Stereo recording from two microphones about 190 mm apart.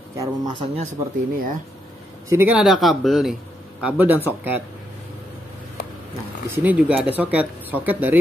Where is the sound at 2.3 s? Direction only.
10° right (ahead or behind).